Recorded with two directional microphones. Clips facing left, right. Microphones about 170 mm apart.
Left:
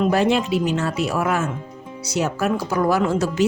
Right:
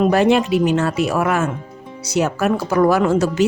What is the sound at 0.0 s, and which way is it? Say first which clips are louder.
A woman's voice: right 4 dB; 60° right (ahead or behind).